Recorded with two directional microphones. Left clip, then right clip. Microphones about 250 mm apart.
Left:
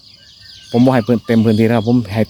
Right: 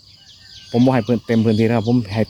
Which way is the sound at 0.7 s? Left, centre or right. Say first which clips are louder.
Left 4 dB; centre.